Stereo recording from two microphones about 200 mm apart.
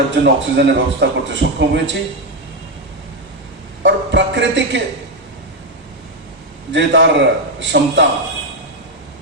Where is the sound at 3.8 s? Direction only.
65° right (ahead or behind).